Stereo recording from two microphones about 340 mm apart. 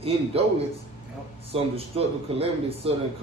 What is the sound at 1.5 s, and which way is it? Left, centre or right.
A man's voice, centre.